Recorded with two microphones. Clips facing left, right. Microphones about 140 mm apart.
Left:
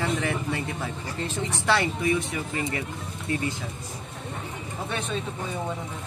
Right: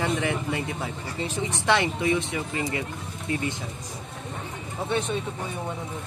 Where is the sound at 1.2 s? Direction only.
15° right (ahead or behind).